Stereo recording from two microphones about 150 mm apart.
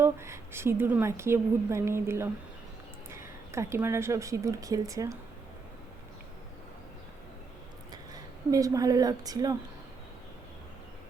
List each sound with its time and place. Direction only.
0.0 s a woman's voice: 15° right (ahead or behind)
8.1 s speech: 20° right (ahead or behind)